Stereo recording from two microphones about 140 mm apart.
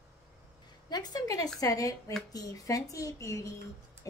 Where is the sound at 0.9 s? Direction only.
30° left (ahead or behind).